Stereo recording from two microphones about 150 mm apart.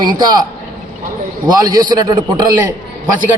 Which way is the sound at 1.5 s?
25° right (ahead or behind).